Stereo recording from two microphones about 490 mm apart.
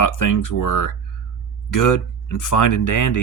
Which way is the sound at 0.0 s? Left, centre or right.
Left.